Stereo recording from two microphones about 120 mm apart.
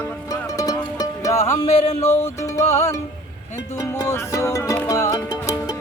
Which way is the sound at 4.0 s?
25° left (ahead or behind).